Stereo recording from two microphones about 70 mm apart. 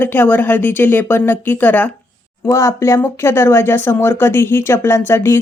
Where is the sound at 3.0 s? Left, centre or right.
Left.